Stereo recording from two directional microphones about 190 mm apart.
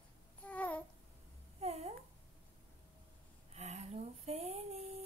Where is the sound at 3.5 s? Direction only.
35° right (ahead or behind).